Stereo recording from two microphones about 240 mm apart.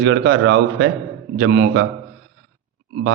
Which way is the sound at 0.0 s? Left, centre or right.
Right.